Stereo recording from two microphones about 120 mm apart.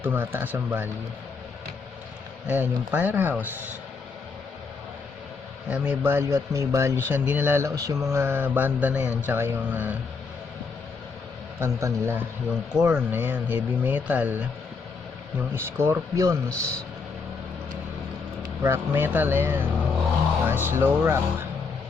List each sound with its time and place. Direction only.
0.0 s speech: 15° right (ahead or behind)
2.5 s speech: 15° right (ahead or behind)
5.6 s speech: 10° right (ahead or behind)
11.6 s speech: 25° right (ahead or behind)
12.5 s speech: 5° right (ahead or behind); by 16.4 s 25° right (ahead or behind)
18.6 s speech: 20° right (ahead or behind)